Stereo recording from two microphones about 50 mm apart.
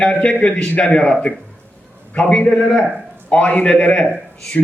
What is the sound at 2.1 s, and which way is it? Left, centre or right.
A man's voice, left.